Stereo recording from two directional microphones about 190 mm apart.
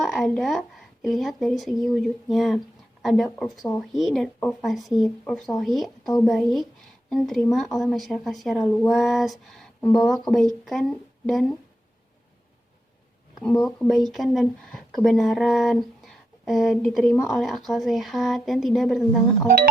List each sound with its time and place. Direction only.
0.0 s speech: centre (ahead or behind)
13.7 s speech: centre (ahead or behind)